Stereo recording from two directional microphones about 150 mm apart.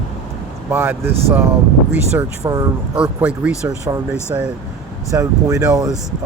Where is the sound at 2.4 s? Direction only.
25° right (ahead or behind).